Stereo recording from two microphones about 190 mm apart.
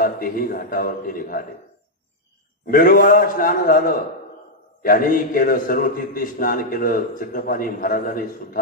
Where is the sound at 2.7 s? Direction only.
45° left (ahead or behind).